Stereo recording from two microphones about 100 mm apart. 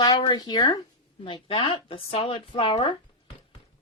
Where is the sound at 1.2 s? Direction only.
60° left (ahead or behind).